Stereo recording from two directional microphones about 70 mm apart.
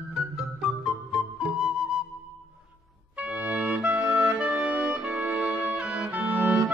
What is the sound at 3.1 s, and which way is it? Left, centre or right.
Music, right.